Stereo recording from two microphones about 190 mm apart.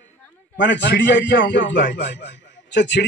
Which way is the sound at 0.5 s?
70° left (ahead or behind).